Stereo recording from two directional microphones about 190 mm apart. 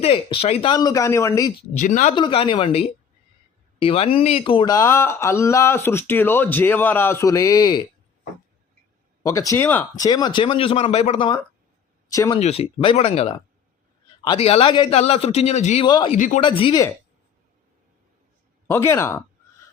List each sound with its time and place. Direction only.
0.0 s speech: 30° left (ahead or behind)
1.7 s a man's voice: 40° left (ahead or behind)
2.1 s speech: 25° left (ahead or behind)
9.2 s speech: 15° left (ahead or behind)
12.0 s speech: 20° left (ahead or behind)
12.4 s a man's voice: 30° left (ahead or behind)
15.9 s speech: 25° left (ahead or behind)
16.1 s speech: 40° left (ahead or behind)
16.4 s speech: 25° left (ahead or behind)
18.7 s speech: 15° left (ahead or behind)